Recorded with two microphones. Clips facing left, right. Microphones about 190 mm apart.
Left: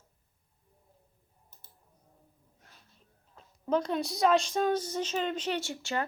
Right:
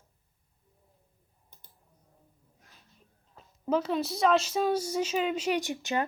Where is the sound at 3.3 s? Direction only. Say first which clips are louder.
Right 1 dB; 5° right (ahead or behind).